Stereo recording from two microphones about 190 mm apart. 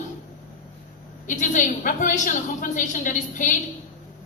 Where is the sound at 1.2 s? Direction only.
40° left (ahead or behind).